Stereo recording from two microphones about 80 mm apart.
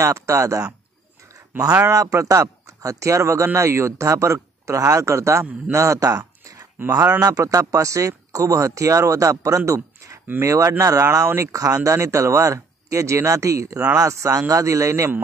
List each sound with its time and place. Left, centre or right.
0.0 s speech: right
1.9 s speech: right